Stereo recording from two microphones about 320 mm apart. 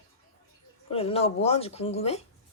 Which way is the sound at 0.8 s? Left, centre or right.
Centre.